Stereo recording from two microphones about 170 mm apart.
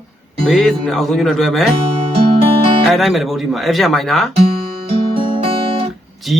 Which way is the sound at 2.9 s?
Centre (ahead or behind).